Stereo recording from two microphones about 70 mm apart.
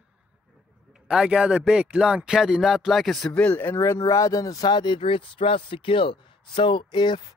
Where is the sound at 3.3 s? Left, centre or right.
Centre.